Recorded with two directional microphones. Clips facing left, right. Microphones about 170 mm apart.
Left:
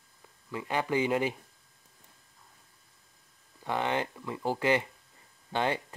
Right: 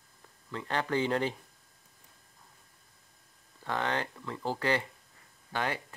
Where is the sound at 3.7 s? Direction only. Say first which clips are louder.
Left 2 dB; 15° left (ahead or behind).